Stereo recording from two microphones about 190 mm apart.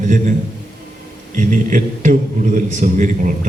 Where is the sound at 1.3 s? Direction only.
45° right (ahead or behind).